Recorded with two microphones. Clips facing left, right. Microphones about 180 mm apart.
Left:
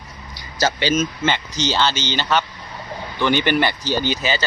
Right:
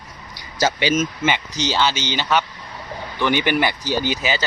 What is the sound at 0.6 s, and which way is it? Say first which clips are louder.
Speech: even; 15° right (ahead or behind).